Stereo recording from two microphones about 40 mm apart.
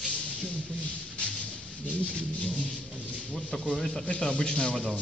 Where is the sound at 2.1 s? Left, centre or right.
Left.